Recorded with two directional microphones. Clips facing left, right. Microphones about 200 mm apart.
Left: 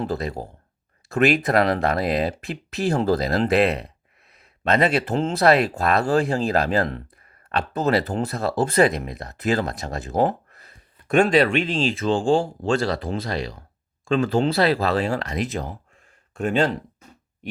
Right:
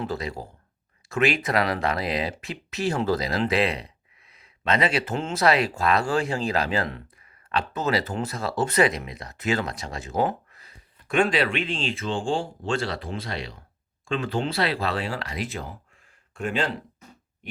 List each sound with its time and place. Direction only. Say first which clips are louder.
0.0 s speech: left 4 dB; 40° left (ahead or behind)
1.4 s speech: left 5 dB; 50° left (ahead or behind)
2.8 s speech: left 4 dB; 35° left (ahead or behind)
5.0 s speech: left 5 dB; 35° left (ahead or behind)
9.0 s speech: left 5 dB; 45° left (ahead or behind)